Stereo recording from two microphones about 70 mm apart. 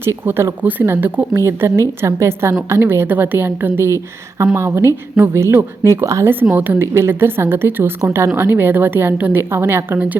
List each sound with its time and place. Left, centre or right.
0.3 s a woman's voice: right
1.5 s a woman's voice: right
6.5 s a woman's voice: right
6.9 s a woman's voice: right